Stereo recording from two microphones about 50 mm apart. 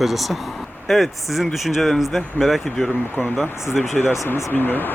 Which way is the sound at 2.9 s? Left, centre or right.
Left.